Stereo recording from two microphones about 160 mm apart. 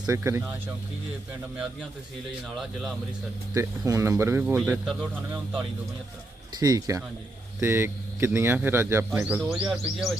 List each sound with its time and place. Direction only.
0.1 s speech: 15° right (ahead or behind)
3.5 s speech: 20° right (ahead or behind)
6.5 s speech: 25° right (ahead or behind)
9.5 s speech: 5° right (ahead or behind)